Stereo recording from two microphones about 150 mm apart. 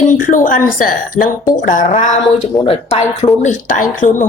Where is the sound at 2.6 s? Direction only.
40° left (ahead or behind).